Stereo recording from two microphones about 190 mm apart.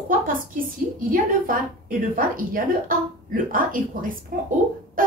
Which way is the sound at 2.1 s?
45° right (ahead or behind).